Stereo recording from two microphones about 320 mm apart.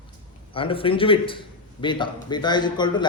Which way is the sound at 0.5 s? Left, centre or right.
Centre.